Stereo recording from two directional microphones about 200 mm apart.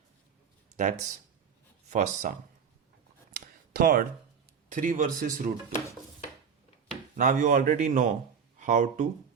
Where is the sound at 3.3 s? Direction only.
45° right (ahead or behind).